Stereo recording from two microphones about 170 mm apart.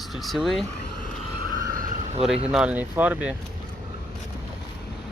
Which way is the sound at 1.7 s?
55° right (ahead or behind).